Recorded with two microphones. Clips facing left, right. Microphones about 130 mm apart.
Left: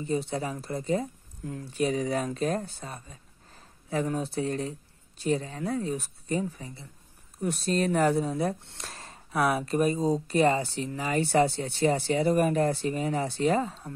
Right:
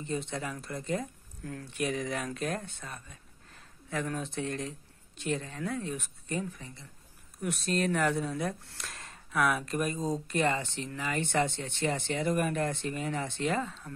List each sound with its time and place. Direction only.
0.3 s speech: 35° left (ahead or behind)